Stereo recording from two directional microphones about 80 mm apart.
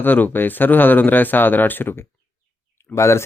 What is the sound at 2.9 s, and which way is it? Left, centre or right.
Speech, left.